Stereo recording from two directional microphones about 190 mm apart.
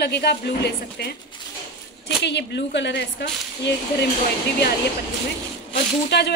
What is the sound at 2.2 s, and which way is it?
A woman's voice, 65° left (ahead or behind).